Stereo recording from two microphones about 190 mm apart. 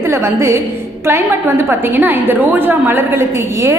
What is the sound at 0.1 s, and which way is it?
A woman's voice, 15° right (ahead or behind).